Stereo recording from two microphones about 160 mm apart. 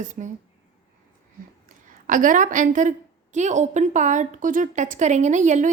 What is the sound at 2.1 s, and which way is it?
A woman's voice, 55° right (ahead or behind).